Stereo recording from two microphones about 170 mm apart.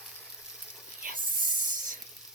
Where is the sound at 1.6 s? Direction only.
50° right (ahead or behind).